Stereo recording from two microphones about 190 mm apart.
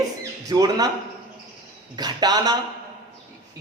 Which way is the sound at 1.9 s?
20° right (ahead or behind).